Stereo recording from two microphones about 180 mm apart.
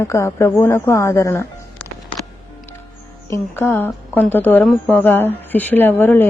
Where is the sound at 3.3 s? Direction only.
15° left (ahead or behind).